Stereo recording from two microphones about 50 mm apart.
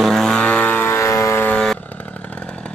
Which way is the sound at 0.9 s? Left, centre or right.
Left.